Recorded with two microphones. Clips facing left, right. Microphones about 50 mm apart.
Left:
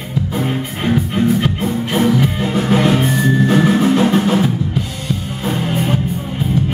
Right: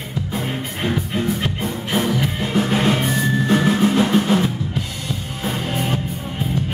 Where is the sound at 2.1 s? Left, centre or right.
Centre.